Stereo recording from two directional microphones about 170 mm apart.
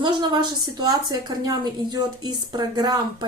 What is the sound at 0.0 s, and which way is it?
A woman's voice, 25° right (ahead or behind).